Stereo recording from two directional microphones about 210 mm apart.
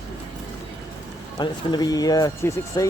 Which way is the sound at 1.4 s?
20° left (ahead or behind).